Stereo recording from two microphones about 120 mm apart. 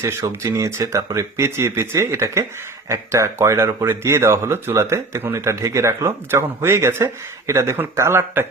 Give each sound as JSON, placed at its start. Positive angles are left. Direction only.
{"t": 0.0, "sound": "speech", "side_deg": -25}